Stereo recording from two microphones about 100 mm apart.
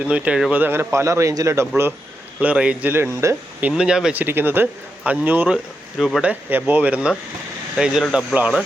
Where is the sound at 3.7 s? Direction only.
10° right (ahead or behind).